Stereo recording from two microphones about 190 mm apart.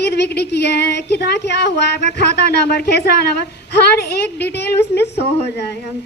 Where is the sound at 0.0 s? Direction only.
60° left (ahead or behind).